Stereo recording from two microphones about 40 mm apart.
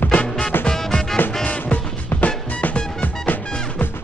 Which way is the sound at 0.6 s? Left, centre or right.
Centre.